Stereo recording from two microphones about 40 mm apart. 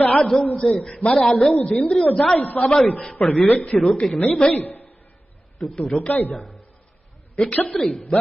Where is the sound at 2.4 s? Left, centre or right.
Left.